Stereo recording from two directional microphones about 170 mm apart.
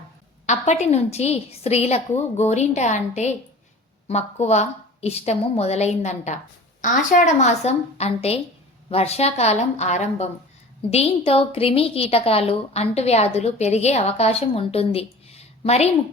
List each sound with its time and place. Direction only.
0.4 s a woman's voice: 40° left (ahead or behind)